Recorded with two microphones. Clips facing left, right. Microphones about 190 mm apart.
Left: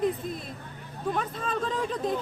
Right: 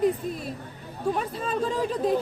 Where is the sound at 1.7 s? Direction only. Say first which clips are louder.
Right 6 dB; 35° right (ahead or behind).